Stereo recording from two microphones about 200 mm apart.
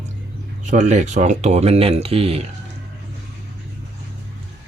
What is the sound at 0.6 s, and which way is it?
Speech, 35° right (ahead or behind).